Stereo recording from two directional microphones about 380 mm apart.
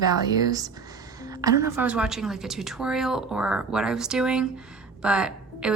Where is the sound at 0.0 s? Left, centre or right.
Centre.